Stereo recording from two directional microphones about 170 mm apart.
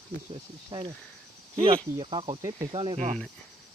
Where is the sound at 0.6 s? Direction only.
30° right (ahead or behind).